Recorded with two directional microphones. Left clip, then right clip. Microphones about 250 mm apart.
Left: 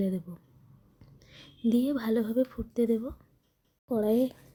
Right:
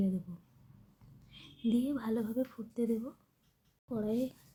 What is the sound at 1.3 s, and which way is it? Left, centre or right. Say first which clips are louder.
A woman's voice: left 6 dB; left.